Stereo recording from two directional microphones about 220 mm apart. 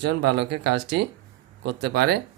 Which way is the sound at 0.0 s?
50° right (ahead or behind).